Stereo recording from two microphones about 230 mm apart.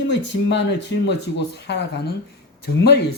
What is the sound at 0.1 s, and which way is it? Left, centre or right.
A man's voice, left.